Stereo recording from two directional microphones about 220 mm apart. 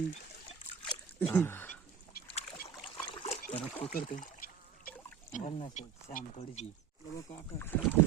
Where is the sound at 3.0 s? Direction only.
20° left (ahead or behind).